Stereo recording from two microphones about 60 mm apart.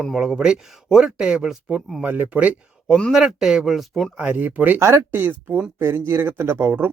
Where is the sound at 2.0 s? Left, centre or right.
Right.